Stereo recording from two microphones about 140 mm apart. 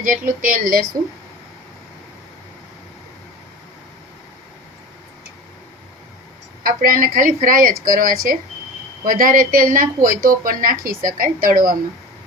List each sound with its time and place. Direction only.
0.0 s a woman's voice: 70° right (ahead or behind)
6.6 s a woman's voice: 90° right